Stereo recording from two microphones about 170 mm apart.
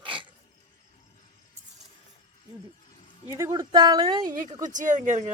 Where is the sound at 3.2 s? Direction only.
20° right (ahead or behind).